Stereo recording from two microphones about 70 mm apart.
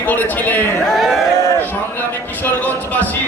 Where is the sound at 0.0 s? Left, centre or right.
Left.